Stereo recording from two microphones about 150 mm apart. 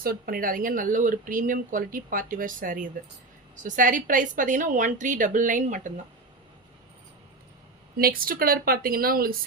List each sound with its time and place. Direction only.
0.0 s speech: 85° right; by 5.9 s 55° right (ahead or behind)
7.9 s speech: 75° right (ahead or behind)